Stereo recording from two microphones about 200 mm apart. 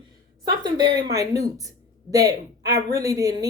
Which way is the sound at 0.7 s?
20° right (ahead or behind).